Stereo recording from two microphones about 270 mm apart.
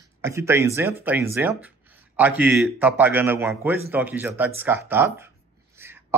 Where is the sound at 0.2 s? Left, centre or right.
Centre.